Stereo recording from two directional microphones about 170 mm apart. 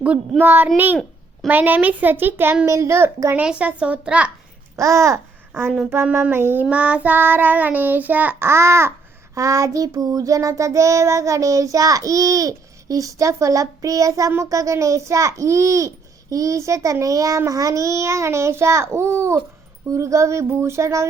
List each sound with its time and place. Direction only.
0.0 s a child's voice: 10° right (ahead or behind)
4.8 s a child's voice: 15° right (ahead or behind)
9.3 s child singing: 20° right (ahead or behind)
16.3 s a child's voice: 20° right (ahead or behind)